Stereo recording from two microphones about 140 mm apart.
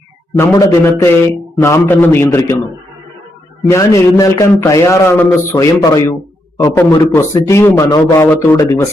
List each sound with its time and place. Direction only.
0.3 s a man's voice: 20° left (ahead or behind)
3.7 s a man's voice: 20° left (ahead or behind)